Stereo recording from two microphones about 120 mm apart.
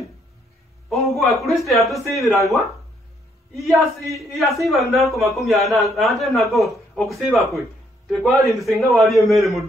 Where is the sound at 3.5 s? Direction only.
Centre (ahead or behind).